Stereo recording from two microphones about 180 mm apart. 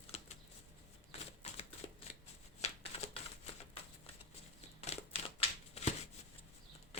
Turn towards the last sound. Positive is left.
turn(degrees=35)  # may be behind; listen again after turning